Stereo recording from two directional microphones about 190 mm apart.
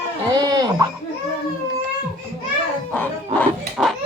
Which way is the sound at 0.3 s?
20° right (ahead or behind).